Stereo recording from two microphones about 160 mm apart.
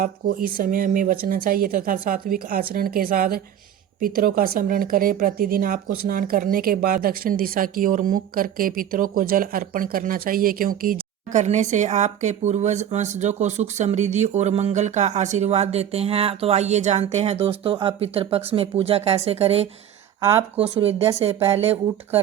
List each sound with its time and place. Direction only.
0.0 s speech: 60° right (ahead or behind); by 21.1 s 35° right (ahead or behind)
21.1 s speech: 15° right (ahead or behind)
21.4 s speech: 40° right (ahead or behind)